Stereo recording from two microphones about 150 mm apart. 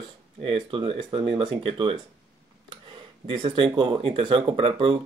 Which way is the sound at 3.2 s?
35° right (ahead or behind).